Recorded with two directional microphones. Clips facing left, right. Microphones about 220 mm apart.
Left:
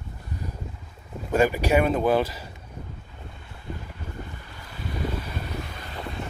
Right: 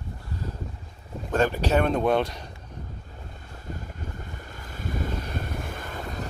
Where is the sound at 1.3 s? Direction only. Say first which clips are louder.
Left 2 dB; 10° left (ahead or behind).